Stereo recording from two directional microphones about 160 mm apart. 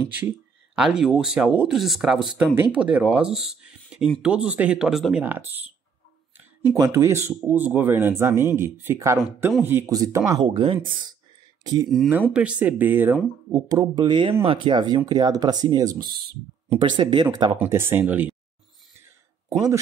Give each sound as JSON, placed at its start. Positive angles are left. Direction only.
{"t": 0.7, "sound": "speech", "side_deg": -5}
{"t": 10.4, "sound": "speech", "side_deg": -35}
{"t": 11.6, "sound": "speech", "side_deg": -25}
{"t": 11.9, "sound": "speech", "side_deg": -5}
{"t": 13.5, "sound": "speech", "side_deg": -25}
{"t": 17.6, "sound": "speech", "side_deg": -15}
{"t": 19.5, "sound": "speech", "side_deg": -20}